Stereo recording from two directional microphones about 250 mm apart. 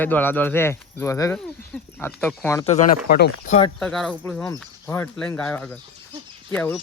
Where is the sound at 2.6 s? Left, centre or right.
Left.